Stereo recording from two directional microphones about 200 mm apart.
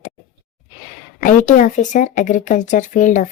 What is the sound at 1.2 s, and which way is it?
Speech, 40° left (ahead or behind).